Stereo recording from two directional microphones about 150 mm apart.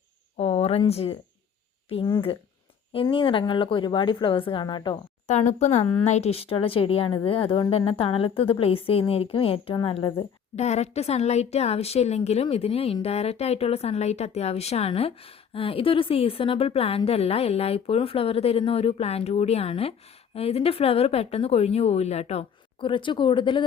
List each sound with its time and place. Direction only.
0.3 s a woman's voice: 40° left (ahead or behind)
5.3 s a woman's voice: 50° left (ahead or behind); by 10.1 s 35° left (ahead or behind)
10.2 s a woman's voice: 45° left (ahead or behind)